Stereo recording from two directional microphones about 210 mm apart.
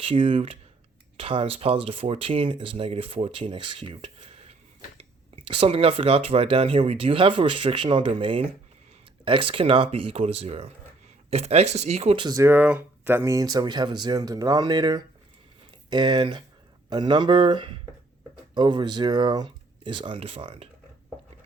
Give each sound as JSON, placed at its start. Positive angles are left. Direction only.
{"t": 0.0, "sound": "speech", "side_deg": -25}